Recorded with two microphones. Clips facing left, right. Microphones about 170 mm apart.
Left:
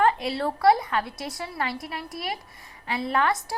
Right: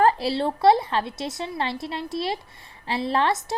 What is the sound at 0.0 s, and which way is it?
A woman's voice, 35° right (ahead or behind).